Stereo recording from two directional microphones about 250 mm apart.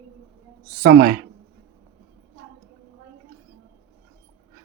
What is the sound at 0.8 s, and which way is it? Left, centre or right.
Speech, right.